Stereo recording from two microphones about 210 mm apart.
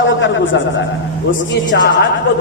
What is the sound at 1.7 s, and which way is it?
Speech, 60° left (ahead or behind).